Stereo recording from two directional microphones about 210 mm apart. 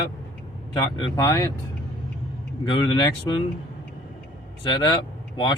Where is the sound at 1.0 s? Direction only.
15° left (ahead or behind).